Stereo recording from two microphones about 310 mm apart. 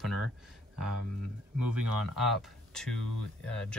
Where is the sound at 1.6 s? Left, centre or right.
Right.